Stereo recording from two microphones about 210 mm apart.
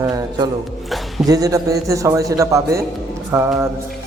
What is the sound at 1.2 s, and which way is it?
A man's voice, 15° right (ahead or behind).